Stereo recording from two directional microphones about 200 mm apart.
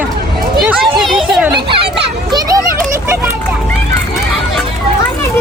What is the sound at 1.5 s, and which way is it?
Children playing, 25° right (ahead or behind).